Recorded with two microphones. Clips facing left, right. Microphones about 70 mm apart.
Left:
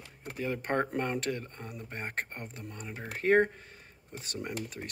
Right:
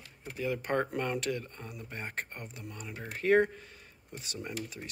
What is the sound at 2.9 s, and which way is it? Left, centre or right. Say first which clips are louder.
Speech: even; left.